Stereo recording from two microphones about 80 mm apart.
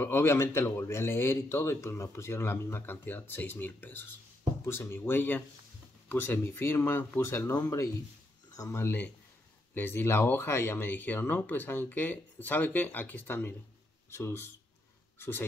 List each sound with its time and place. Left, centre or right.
0.0 s speech: left
8.5 s speech: left